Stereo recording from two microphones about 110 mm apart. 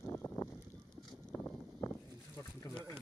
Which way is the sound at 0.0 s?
20° left (ahead or behind).